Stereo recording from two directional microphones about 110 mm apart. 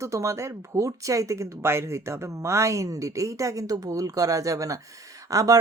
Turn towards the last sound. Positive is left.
turn(degrees=-30)  # may be behind; listen again after turning